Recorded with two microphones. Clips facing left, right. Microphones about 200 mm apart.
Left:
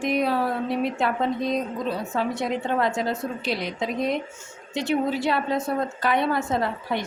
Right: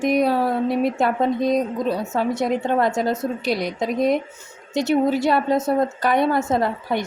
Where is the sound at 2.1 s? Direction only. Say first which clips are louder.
Right 4 dB; 40° right (ahead or behind).